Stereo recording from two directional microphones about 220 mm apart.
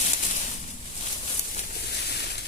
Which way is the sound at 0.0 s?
35° left (ahead or behind).